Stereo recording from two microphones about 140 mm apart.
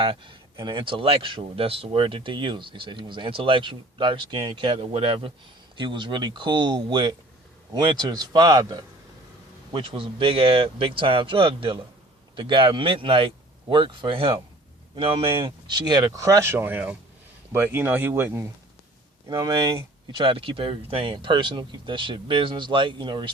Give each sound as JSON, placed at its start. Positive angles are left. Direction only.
{"t": 0.0, "sound": "a man's voice", "side_deg": -35}
{"t": 9.7, "sound": "speech", "side_deg": -40}